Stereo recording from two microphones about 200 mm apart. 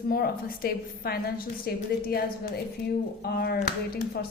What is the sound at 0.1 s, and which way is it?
A woman's voice, 50° left (ahead or behind).